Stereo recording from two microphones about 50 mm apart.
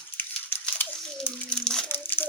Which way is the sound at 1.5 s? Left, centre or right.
Centre.